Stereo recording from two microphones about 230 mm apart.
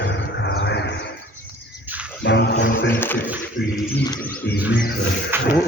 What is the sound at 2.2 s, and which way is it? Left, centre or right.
Speech, left.